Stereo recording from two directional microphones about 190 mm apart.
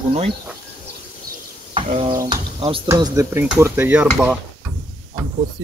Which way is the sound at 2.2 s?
25° right (ahead or behind).